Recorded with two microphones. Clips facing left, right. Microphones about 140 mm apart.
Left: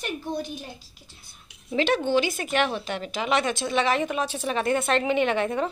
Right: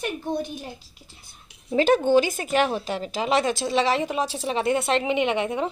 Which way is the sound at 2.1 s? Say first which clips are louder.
Right 4 dB; 40° right (ahead or behind).